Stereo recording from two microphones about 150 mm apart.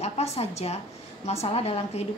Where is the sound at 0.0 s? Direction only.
45° left (ahead or behind).